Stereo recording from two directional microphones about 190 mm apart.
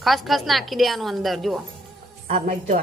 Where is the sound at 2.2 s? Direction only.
35° right (ahead or behind).